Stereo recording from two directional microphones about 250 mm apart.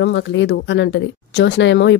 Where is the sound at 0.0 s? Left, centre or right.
Left.